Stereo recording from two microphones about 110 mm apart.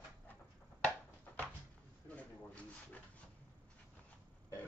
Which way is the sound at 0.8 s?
10° left (ahead or behind).